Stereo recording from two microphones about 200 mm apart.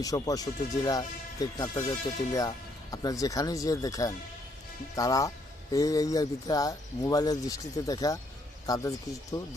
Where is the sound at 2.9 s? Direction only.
15° left (ahead or behind).